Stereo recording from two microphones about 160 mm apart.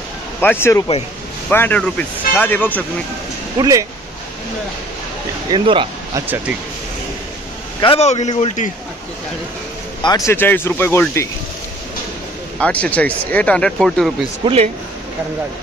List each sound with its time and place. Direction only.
0.4 s speech: 15° left (ahead or behind)
3.5 s speech: 20° right (ahead or behind)
5.5 s speech: 30° right (ahead or behind)
6.1 s speech: 15° right (ahead or behind)
7.8 s a man's voice: 40° left (ahead or behind)
10.0 s speech: 20° left (ahead or behind)
12.5 s speech: 5° left (ahead or behind)
14.4 s speech: 35° right (ahead or behind)